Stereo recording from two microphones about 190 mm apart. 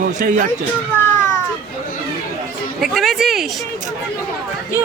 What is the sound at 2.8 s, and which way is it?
Speech, centre (ahead or behind).